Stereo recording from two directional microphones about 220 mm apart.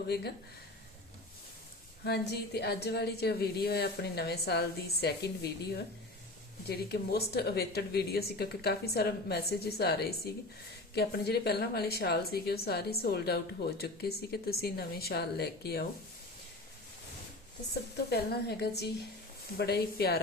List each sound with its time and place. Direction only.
0.1 s speech: 50° left (ahead or behind)
2.0 s speech: 50° left (ahead or behind)
18.1 s speech: 50° left (ahead or behind)